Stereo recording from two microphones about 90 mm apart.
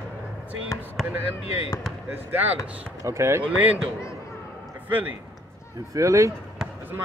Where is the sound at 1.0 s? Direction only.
5° left (ahead or behind).